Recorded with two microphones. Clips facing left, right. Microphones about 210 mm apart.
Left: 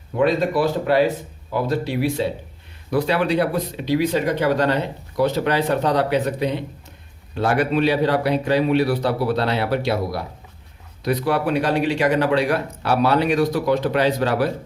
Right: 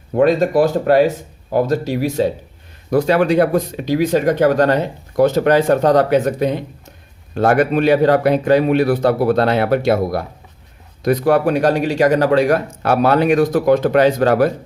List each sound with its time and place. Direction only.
0.2 s speech: 45° right (ahead or behind)